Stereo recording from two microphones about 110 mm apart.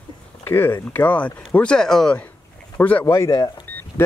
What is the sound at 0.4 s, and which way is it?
Speech, 20° left (ahead or behind).